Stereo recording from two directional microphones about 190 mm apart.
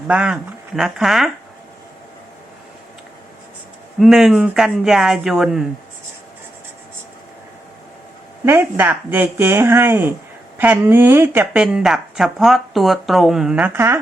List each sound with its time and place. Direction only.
0.1 s speech: 5° right (ahead or behind)
4.0 s speech: centre (ahead or behind)
8.4 s speech: 10° right (ahead or behind)